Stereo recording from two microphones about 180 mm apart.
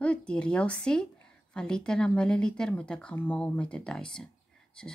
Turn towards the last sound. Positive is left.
turn(degrees=5)  # may be behind; listen again after turning